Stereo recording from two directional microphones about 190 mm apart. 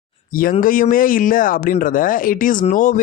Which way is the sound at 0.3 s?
45° left (ahead or behind).